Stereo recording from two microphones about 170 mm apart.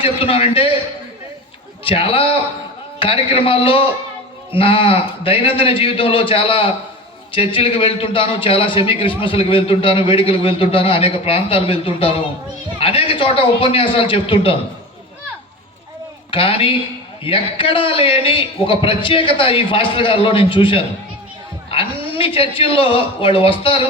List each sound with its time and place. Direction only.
0.0 s a man's voice: 35° left (ahead or behind)
1.8 s a man's voice: 35° left (ahead or behind)
16.3 s a man's voice: 35° left (ahead or behind)